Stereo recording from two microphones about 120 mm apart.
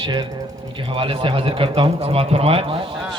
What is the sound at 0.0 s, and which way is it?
Speech, 40° right (ahead or behind).